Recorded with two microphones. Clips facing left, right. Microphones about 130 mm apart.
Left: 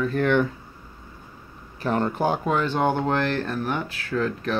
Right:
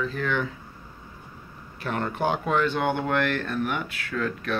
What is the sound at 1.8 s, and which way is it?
Speech, 35° left (ahead or behind).